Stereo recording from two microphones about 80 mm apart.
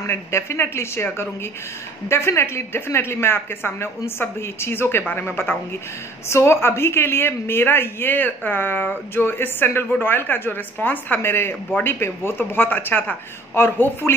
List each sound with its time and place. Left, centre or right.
0.0 s speech: left
2.0 s a woman's voice: left